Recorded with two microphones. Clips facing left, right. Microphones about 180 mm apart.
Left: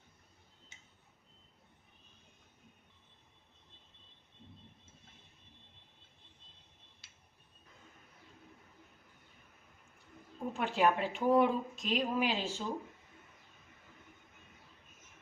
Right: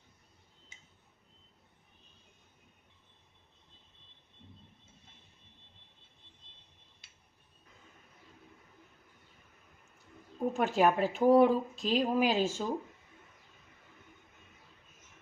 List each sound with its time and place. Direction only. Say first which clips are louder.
10.5 s speech: right 3 dB; 45° right (ahead or behind)